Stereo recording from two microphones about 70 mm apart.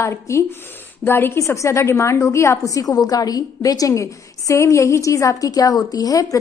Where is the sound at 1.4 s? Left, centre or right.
Left.